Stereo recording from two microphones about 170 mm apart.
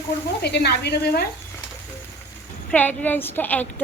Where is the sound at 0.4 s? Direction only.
75° left (ahead or behind).